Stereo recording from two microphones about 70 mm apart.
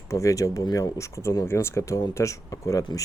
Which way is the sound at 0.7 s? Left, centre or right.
Left.